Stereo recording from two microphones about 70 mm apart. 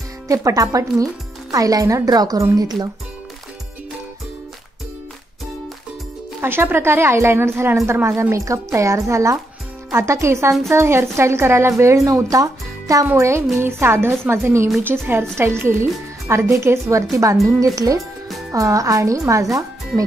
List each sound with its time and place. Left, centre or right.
0.3 s speech: right
6.4 s a woman's voice: right
13.6 s a woman's voice: right